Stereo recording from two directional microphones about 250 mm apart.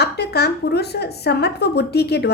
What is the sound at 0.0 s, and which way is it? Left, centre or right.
A woman's voice, left.